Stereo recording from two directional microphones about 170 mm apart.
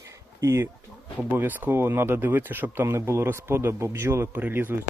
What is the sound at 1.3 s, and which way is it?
Speech, 10° right (ahead or behind).